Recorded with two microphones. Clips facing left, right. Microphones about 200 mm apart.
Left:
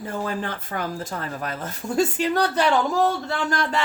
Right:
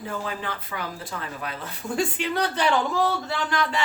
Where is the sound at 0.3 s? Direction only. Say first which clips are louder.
Left 4 dB; 45° left (ahead or behind).